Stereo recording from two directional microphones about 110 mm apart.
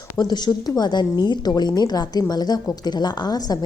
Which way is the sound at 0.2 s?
40° left (ahead or behind).